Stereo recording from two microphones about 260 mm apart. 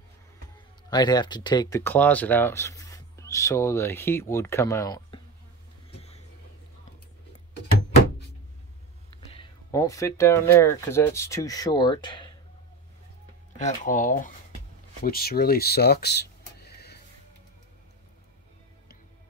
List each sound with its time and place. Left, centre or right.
0.8 s speech: centre
5.9 s vehicle: left
9.3 s speech: centre
13.6 s speech: left